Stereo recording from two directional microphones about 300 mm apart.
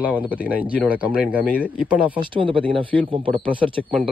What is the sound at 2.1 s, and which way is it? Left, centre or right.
Speech, centre.